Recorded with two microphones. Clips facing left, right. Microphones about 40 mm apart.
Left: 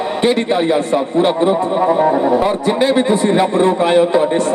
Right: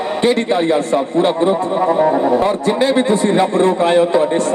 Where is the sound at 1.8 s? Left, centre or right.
Centre.